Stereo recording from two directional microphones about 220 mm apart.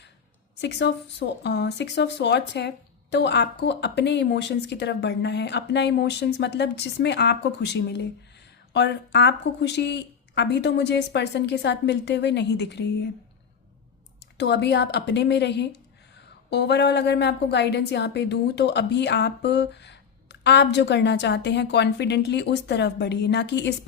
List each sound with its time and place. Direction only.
0.6 s speech: 50° left (ahead or behind)
14.3 s speech: 50° left (ahead or behind)